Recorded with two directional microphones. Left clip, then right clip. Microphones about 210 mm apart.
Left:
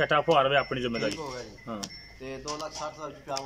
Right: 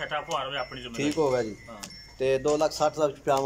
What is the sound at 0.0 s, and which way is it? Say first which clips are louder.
Speech: left 8 dB; 55° left (ahead or behind).